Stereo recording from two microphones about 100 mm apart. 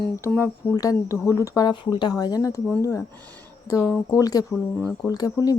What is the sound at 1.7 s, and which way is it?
A woman's voice, 50° left (ahead or behind).